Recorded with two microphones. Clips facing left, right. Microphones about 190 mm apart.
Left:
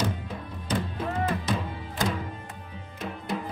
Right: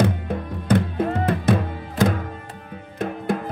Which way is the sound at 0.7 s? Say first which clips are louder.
Right 9 dB; 60° right (ahead or behind).